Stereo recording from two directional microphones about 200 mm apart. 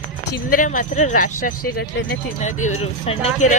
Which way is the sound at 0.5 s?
40° left (ahead or behind).